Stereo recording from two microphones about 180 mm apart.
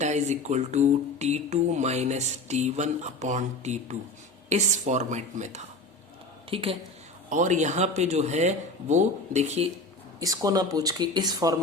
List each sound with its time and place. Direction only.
0.0 s speech: 40° right (ahead or behind)
7.3 s speech: 45° right (ahead or behind)
10.2 s speech: 20° right (ahead or behind)